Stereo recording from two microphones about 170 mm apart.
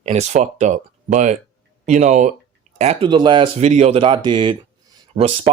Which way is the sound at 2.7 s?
35° right (ahead or behind).